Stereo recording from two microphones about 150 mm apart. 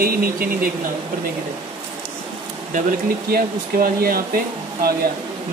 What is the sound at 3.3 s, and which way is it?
Speech, 85° right.